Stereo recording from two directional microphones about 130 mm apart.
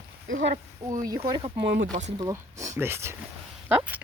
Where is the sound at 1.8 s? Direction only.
75° right (ahead or behind).